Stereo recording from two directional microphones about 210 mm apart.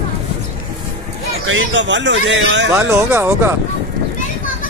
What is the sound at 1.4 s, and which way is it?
A man's voice, 65° right (ahead or behind).